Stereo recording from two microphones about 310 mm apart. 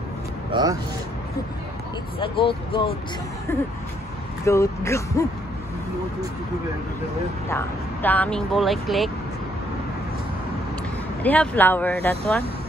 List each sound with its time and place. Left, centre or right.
0.5 s speech: centre
2.1 s speech: centre
7.4 s speech: centre
11.2 s speech: centre